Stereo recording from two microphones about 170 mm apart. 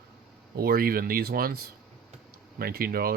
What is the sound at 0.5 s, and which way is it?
Speech, 65° right (ahead or behind).